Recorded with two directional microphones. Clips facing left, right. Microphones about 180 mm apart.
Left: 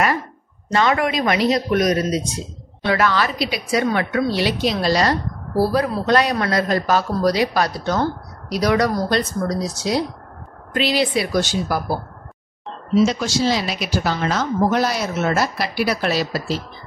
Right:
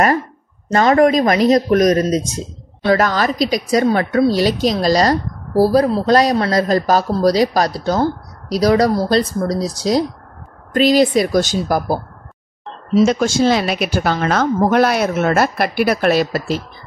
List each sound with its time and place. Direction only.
0.7 s a woman's voice: 40° right (ahead or behind)